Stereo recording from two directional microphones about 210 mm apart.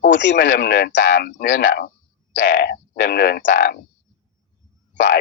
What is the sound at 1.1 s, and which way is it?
Speech, 45° left (ahead or behind).